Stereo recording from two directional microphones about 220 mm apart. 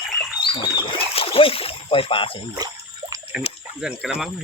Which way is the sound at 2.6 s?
15° right (ahead or behind).